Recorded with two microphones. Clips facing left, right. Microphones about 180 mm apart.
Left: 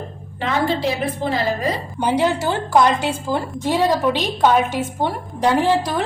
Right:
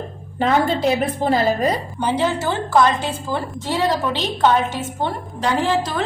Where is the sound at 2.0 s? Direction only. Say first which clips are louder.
Left 5 dB; 15° left (ahead or behind).